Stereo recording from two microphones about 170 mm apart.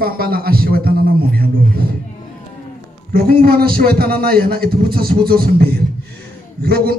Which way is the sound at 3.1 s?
60° right (ahead or behind).